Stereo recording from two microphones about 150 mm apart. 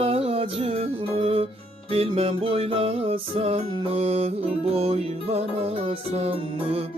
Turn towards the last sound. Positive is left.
turn(degrees=-45)  # may be behind; listen again after turning